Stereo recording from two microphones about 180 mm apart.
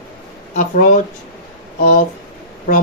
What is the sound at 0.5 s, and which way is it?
Speech, 45° left (ahead or behind).